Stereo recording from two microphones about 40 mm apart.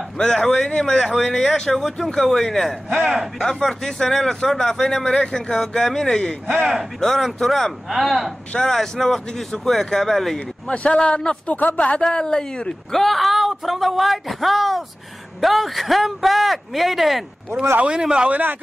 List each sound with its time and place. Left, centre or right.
0.2 s speech: centre
2.9 s a man's voice: right
3.3 s speech: centre
7.0 s a man's voice: centre
10.7 s a woman's voice: left
11.5 s speech: left
11.9 s a woman's voice: left
12.9 s a man's voice: centre
17.8 s a man's voice: right
18.3 s a man's voice: right